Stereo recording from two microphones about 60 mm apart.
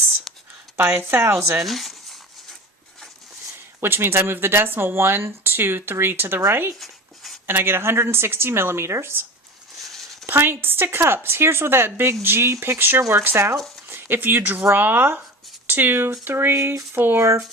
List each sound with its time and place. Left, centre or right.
0.9 s a woman's voice: right
1.6 s zipper: centre
3.8 s speech: right
6.7 s writing: centre
7.4 s a woman's voice: right
10.2 s speech: right
13.0 s a woman's voice: right
13.9 s speech: right
16.6 s speech: right
16.9 s speech: right
17.2 s a woman's voice: right